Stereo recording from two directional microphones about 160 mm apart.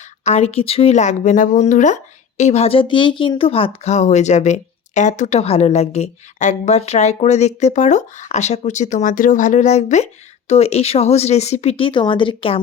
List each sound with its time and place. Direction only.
0.0 s speech: 40° left (ahead or behind)